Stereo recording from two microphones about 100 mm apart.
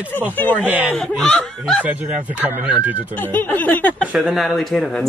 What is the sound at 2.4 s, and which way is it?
Speech, 20° right (ahead or behind).